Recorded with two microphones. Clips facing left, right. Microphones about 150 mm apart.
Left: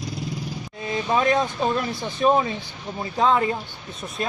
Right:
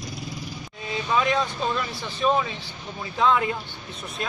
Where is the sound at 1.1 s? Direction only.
50° left (ahead or behind).